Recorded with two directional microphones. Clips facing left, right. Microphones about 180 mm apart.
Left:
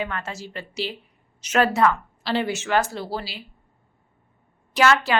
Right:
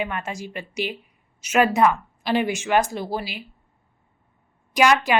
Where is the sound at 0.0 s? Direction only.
15° right (ahead or behind).